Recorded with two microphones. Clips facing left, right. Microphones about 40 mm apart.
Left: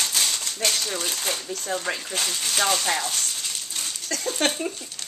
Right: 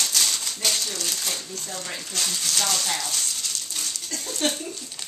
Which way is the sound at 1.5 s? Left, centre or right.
Left.